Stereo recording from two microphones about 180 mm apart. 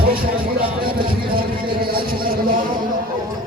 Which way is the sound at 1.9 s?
55° right (ahead or behind).